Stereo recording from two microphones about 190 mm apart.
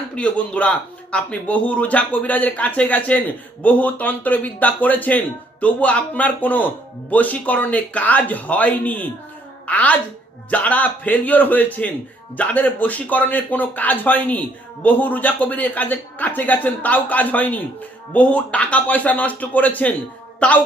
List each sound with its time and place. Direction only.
0.2 s speech: 5° left (ahead or behind)